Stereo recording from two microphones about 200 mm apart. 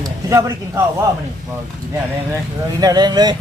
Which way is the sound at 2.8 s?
20° right (ahead or behind).